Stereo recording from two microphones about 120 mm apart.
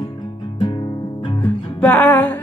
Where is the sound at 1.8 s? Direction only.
15° left (ahead or behind).